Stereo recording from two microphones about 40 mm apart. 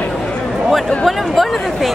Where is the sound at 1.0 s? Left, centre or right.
Centre.